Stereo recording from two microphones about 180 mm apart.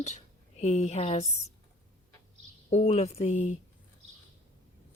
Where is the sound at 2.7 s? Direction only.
40° left (ahead or behind).